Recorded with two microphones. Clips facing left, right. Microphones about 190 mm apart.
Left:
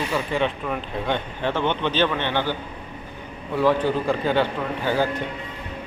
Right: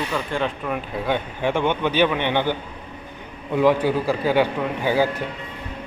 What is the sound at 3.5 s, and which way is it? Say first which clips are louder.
Speech: right 2 dB; 10° right (ahead or behind).